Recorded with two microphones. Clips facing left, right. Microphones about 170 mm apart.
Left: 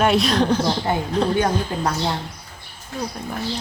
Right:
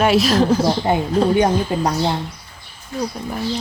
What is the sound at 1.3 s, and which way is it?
Speech, 20° right (ahead or behind).